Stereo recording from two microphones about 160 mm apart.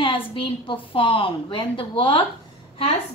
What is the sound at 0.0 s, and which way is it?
A woman's voice, 35° left (ahead or behind).